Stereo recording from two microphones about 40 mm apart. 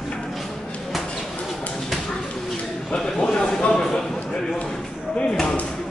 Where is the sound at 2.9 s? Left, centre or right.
Centre.